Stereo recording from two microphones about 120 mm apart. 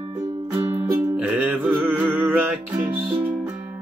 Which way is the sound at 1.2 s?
15° right (ahead or behind).